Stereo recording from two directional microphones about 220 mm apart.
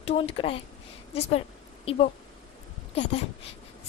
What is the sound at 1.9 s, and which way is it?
Speech, 25° left (ahead or behind).